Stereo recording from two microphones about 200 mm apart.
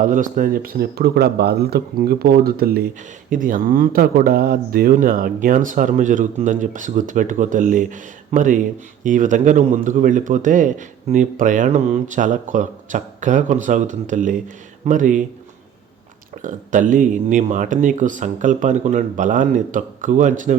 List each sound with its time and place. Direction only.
0.0 s a man's voice: 40° right (ahead or behind)
16.4 s a man's voice: 40° right (ahead or behind)